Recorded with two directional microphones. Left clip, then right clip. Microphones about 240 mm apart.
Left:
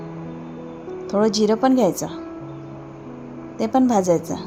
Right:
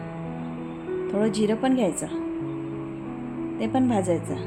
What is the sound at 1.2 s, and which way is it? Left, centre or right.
Speech, left.